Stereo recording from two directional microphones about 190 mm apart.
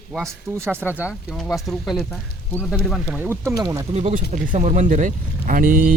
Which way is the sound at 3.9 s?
35° right (ahead or behind).